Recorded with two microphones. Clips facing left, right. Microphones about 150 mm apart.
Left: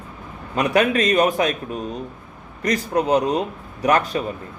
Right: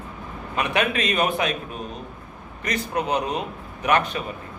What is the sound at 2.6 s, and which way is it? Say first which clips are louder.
A man's voice: left 5 dB; 35° left (ahead or behind).